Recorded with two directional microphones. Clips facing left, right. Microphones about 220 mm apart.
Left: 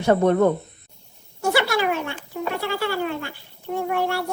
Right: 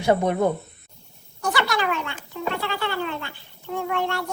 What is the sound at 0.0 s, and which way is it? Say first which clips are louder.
Speech: left 3 dB; 10° right (ahead or behind).